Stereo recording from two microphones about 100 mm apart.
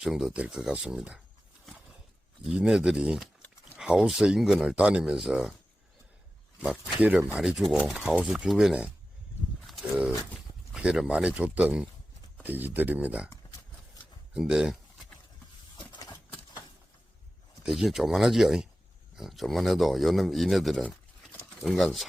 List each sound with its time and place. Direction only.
0.0 s speech: 5° right (ahead or behind)
2.5 s speech: 5° right (ahead or behind)
7.0 s speech: 15° right (ahead or behind)
7.3 s speech: 5° right (ahead or behind)
9.6 s a sound: centre (ahead or behind)
10.8 s speech: 5° right (ahead or behind)
13.3 s a sound: 40° left (ahead or behind)
14.3 s speech: 5° right (ahead or behind)
15.8 s a sound: 45° left (ahead or behind)
17.6 s speech: 5° right (ahead or behind)